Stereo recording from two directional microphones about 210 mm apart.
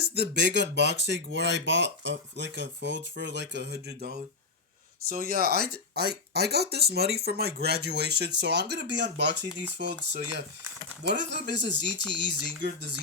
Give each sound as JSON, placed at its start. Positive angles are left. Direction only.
{"t": 0.0, "sound": "speech", "side_deg": -50}